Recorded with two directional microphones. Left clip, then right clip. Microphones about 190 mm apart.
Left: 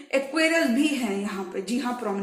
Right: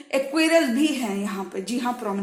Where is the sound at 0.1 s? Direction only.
35° right (ahead or behind).